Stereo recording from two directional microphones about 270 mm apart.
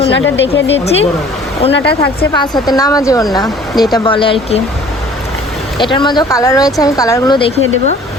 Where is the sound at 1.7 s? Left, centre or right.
Left.